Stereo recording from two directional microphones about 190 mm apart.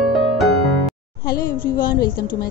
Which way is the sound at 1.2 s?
50° left (ahead or behind).